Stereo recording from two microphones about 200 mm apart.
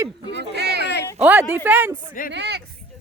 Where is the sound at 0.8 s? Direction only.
60° left (ahead or behind).